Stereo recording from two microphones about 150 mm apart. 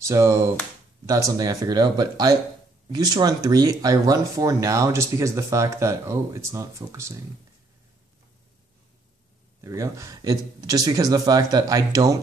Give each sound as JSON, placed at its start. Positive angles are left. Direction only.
{"t": 0.0, "sound": "speech", "side_deg": -20}
{"t": 9.6, "sound": "speech", "side_deg": -20}